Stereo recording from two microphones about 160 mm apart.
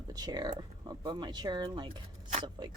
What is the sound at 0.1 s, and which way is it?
Speech, 25° right (ahead or behind).